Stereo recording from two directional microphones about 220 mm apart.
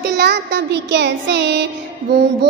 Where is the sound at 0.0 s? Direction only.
50° right (ahead or behind).